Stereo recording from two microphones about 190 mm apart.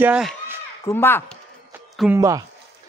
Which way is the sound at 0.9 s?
10° left (ahead or behind).